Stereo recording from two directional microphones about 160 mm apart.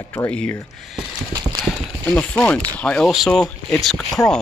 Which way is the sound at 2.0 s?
10° left (ahead or behind).